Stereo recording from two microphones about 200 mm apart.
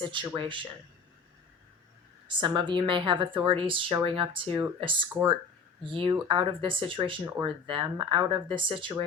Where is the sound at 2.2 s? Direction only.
25° right (ahead or behind).